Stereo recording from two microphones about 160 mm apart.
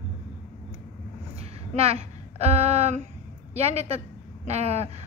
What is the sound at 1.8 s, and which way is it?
A woman's voice, 40° right (ahead or behind).